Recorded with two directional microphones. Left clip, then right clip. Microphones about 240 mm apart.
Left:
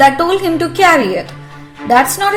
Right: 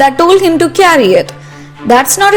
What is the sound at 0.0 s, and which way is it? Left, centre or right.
A woman's voice, right.